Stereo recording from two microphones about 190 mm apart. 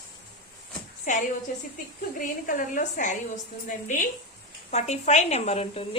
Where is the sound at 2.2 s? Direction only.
45° left (ahead or behind).